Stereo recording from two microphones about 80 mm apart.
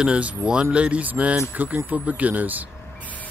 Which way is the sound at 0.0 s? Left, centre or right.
Centre.